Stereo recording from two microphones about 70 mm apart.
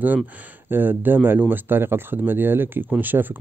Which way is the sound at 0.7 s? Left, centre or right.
Right.